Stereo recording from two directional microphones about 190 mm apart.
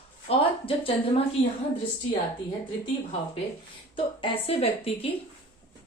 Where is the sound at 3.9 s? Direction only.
30° left (ahead or behind).